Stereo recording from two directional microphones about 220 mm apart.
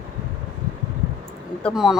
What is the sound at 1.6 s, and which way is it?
Speech, centre (ahead or behind).